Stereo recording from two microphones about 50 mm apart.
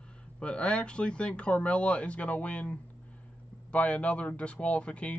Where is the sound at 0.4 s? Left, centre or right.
Left.